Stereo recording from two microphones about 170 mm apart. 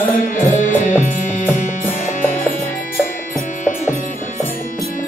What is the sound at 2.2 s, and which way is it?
Music, 15° left (ahead or behind).